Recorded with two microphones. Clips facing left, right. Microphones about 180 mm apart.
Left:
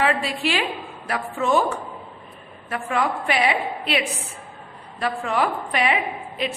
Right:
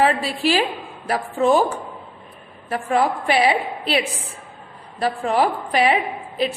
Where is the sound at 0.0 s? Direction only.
35° right (ahead or behind).